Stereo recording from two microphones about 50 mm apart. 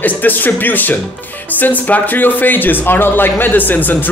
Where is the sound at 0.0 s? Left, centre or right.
Left.